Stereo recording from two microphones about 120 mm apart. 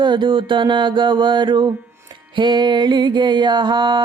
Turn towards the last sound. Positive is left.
turn(degrees=-40)  # may be behind; listen again after turning